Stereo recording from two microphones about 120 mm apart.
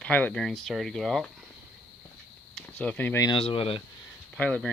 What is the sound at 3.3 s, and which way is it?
Speech, 55° left (ahead or behind).